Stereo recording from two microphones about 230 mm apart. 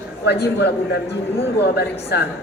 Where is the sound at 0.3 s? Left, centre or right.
Left.